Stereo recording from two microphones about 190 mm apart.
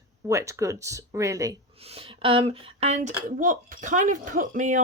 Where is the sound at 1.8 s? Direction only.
30° right (ahead or behind).